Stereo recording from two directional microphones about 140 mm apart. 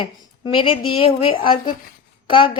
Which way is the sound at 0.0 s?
35° left (ahead or behind).